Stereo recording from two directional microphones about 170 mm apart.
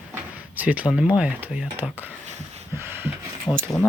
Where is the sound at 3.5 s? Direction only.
15° left (ahead or behind).